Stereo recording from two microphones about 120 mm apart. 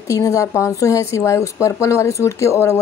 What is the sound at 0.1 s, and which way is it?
Speech, 25° left (ahead or behind).